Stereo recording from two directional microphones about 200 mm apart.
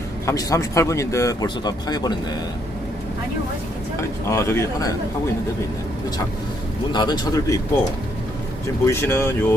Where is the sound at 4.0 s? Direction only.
15° left (ahead or behind).